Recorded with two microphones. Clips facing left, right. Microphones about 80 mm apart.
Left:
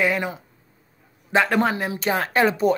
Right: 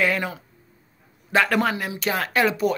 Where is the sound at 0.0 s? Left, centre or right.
Centre.